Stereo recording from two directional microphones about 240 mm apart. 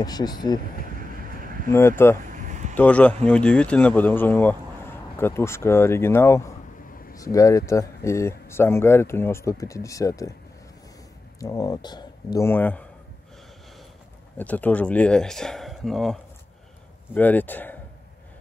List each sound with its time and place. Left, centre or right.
0.0 s speech: centre
1.7 s speech: centre
2.3 s a sound: right
2.7 s speech: centre
11.3 s speech: centre
14.4 s speech: centre